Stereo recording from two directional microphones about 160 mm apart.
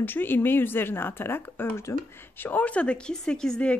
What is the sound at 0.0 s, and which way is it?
Speech, 10° left (ahead or behind).